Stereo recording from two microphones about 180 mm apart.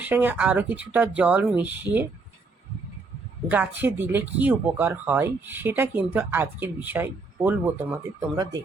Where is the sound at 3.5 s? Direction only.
10° right (ahead or behind).